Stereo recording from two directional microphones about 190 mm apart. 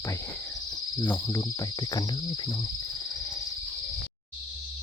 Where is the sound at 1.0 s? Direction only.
15° left (ahead or behind).